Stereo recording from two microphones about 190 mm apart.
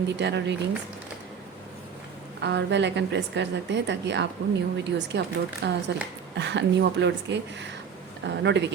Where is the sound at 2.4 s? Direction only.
65° right (ahead or behind).